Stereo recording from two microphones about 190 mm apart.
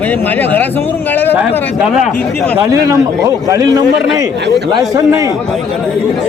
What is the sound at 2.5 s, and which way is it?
A man's voice, 15° right (ahead or behind).